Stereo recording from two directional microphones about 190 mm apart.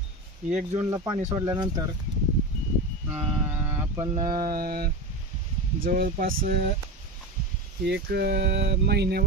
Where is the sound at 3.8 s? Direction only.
20° right (ahead or behind).